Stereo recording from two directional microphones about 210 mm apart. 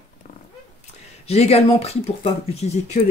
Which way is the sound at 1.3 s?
30° left (ahead or behind).